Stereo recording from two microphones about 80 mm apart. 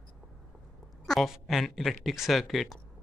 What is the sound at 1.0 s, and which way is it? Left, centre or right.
A woman's voice, centre.